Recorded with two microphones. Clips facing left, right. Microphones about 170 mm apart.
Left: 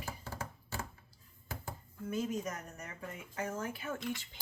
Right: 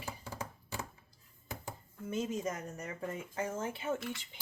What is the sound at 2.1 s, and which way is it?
Speech, 25° right (ahead or behind).